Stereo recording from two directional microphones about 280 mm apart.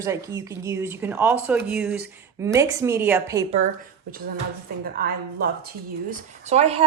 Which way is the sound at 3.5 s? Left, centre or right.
Right.